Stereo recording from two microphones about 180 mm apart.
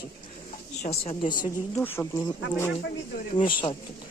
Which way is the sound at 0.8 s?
35° left (ahead or behind).